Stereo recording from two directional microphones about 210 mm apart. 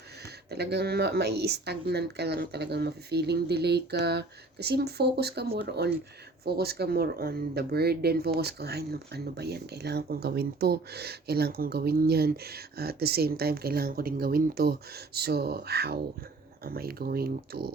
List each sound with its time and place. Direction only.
0.5 s speech: 50° right (ahead or behind)